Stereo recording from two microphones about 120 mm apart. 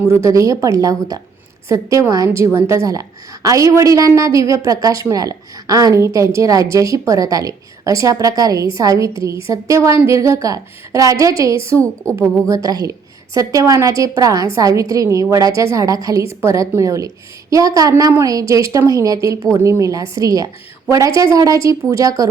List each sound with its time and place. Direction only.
0.0 s a woman's voice: 25° right (ahead or behind)